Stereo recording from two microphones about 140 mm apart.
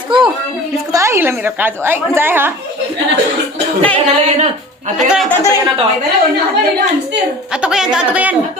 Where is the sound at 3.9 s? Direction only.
50° right (ahead or behind).